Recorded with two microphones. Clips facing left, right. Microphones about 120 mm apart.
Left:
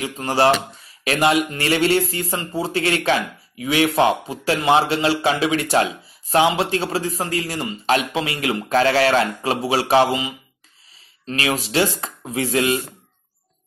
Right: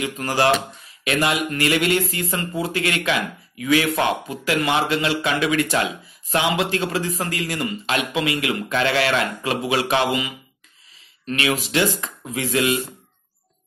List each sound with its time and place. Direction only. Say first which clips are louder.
0.0 s a man's voice: left 2 dB; 30° left (ahead or behind)